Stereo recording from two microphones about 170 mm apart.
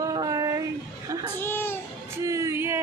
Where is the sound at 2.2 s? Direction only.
15° right (ahead or behind).